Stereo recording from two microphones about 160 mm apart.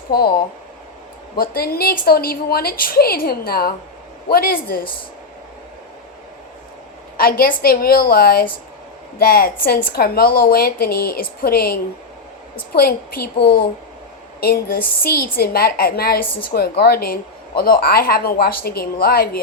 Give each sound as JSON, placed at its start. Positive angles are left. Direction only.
{"t": 0.1, "sound": "speech", "side_deg": 70}
{"t": 1.4, "sound": "speech", "side_deg": 70}
{"t": 7.2, "sound": "speech", "side_deg": 70}